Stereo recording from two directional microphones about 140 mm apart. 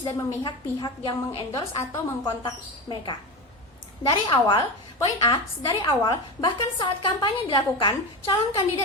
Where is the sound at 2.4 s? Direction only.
35° left (ahead or behind).